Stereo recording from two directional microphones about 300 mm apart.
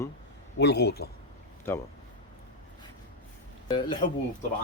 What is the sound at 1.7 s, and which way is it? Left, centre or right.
Speech, centre.